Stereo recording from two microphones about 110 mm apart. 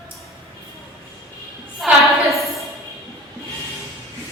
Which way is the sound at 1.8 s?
Centre (ahead or behind).